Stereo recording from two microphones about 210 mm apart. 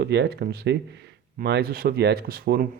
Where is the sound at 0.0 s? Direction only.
50° right (ahead or behind).